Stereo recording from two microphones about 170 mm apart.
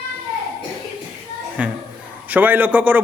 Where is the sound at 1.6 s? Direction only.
5° right (ahead or behind).